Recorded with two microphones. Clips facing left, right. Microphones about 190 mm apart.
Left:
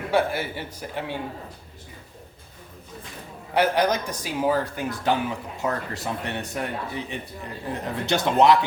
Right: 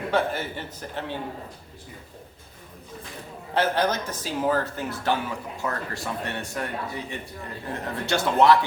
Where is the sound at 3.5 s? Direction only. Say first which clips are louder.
Left 2 dB; 15° left (ahead or behind).